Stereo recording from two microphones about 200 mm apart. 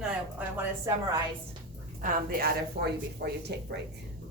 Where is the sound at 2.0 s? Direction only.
40° right (ahead or behind).